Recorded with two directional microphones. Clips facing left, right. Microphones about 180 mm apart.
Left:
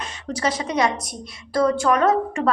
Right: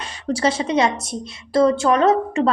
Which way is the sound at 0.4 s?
25° right (ahead or behind).